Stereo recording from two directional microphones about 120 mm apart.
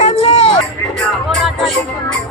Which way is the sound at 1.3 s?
Centre (ahead or behind).